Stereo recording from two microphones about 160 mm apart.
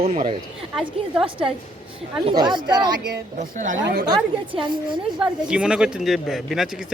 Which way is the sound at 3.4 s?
50° right (ahead or behind).